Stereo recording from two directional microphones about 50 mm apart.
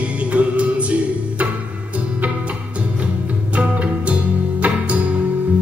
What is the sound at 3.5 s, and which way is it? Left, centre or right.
Music, right.